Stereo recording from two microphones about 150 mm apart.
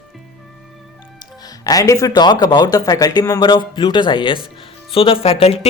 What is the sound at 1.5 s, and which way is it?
Speech, 25° left (ahead or behind).